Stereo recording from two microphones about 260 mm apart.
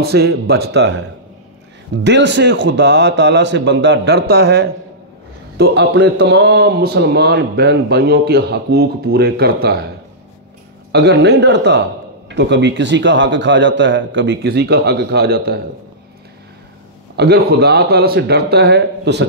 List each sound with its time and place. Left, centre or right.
0.0 s a man's voice: right
2.0 s a man's voice: right
10.9 s a man's voice: right
17.2 s a man's voice: right